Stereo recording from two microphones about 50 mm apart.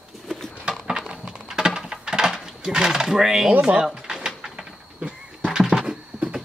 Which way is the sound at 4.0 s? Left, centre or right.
Centre.